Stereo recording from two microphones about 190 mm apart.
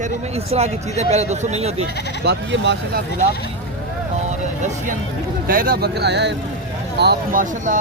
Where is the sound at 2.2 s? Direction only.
65° right (ahead or behind).